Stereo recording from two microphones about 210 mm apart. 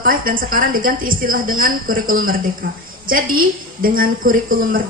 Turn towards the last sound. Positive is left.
turn(degrees=-40)  # may be behind; listen again after turning